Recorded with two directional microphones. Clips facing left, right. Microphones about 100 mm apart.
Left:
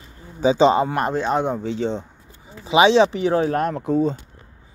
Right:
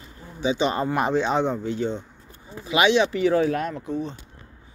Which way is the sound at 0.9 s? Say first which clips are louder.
Left 1 dB; centre (ahead or behind).